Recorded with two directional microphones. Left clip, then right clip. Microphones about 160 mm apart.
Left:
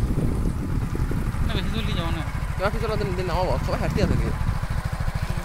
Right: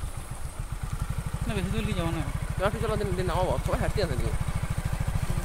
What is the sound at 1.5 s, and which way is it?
Speech, 25° right (ahead or behind).